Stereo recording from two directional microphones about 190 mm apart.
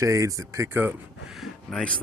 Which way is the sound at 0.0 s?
15° right (ahead or behind).